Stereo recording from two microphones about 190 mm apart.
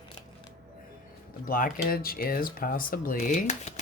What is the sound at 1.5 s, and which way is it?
Speech, 50° left (ahead or behind).